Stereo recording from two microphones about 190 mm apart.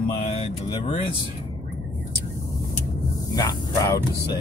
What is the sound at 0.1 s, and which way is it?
Speech, 30° left (ahead or behind).